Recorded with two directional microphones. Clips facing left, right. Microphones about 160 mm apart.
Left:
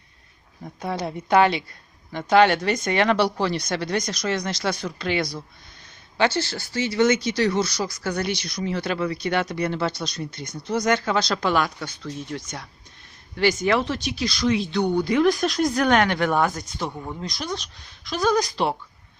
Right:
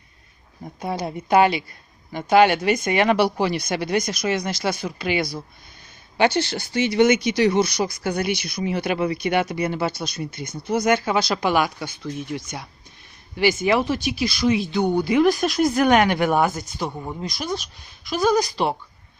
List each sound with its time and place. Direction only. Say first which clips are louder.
0.8 s speech: right 1 dB; 5° right (ahead or behind)